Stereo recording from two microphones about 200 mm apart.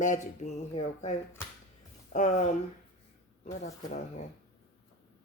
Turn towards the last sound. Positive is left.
turn(degrees=35)  # may be behind; listen again after turning